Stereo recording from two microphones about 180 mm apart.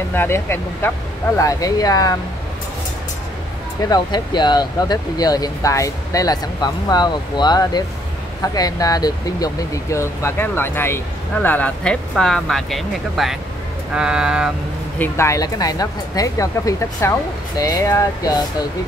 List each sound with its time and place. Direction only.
0.1 s speech: 10° left (ahead or behind)
3.9 s speech: 25° left (ahead or behind); by 14.5 s 5° right (ahead or behind)
15.0 s speech: 15° left (ahead or behind)